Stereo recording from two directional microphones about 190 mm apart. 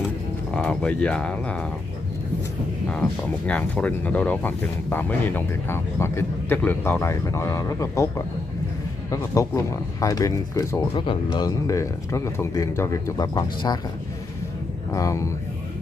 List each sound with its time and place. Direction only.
0.5 s speech: 5° left (ahead or behind)
2.9 s speech: 5° left (ahead or behind); by 13.7 s 20° left (ahead or behind)
14.9 s speech: 15° left (ahead or behind)